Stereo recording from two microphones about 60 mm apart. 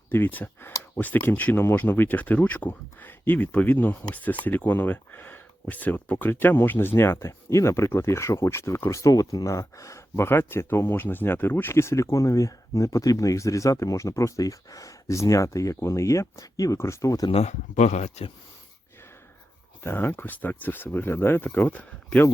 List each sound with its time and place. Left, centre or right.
0.1 s speech: left
10.2 s speech: left
16.7 s speech: left
19.8 s speech: left
21.4 s speech: left